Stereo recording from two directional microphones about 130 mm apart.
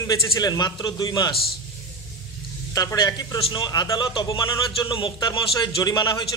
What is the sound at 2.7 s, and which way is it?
A man's voice, 25° left (ahead or behind).